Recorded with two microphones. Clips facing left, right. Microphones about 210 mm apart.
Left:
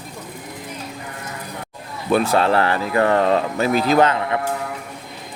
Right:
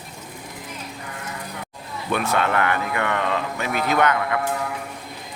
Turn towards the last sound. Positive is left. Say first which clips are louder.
# left 4 dB
turn(degrees=30)  # may be behind; listen again after turning